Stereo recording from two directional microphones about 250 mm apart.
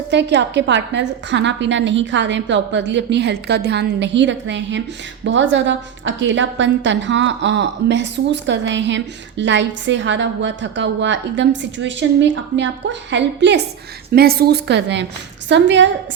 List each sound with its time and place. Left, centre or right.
0.1 s a woman's voice: right